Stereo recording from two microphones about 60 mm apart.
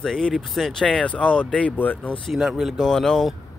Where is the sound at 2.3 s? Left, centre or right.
Centre.